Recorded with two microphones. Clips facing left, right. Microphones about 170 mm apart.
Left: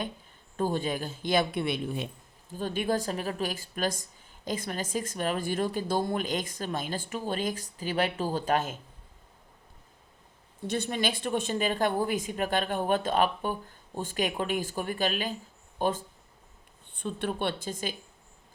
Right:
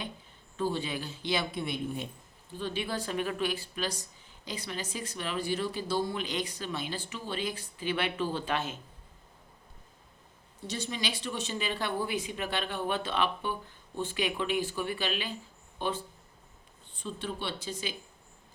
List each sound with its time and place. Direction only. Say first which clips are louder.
0.5 s speech: left 3 dB; 45° left (ahead or behind)
1.6 s speech: left 3 dB; 75° left (ahead or behind)
2.5 s speech: left 5 dB; 45° left (ahead or behind)
10.7 s speech: left 6 dB; 55° left (ahead or behind)
16.9 s speech: left 5 dB; 60° left (ahead or behind)